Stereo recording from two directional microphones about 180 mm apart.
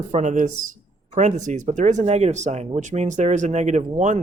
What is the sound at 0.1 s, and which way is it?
Speech, 45° right (ahead or behind).